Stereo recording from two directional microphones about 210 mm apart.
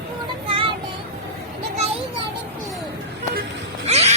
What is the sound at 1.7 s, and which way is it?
Children playing, 30° right (ahead or behind).